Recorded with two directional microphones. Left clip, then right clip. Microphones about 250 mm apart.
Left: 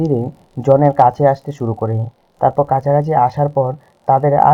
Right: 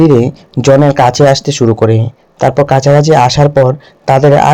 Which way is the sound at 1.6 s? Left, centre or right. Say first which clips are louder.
Right 10 dB; right.